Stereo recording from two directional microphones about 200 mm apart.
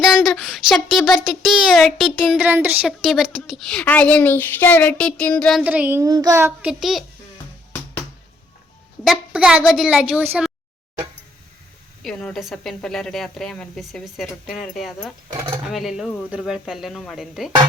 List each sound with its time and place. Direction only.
0.0 s speech: centre (ahead or behind)
9.0 s speech: 5° right (ahead or behind)
12.0 s speech: centre (ahead or behind)